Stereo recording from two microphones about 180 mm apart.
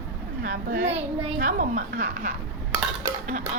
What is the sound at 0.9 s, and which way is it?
Speech, 30° right (ahead or behind).